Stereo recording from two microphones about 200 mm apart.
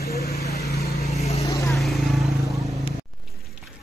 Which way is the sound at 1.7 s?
Centre (ahead or behind).